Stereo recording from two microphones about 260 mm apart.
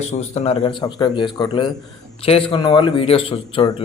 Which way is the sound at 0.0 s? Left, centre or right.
Left.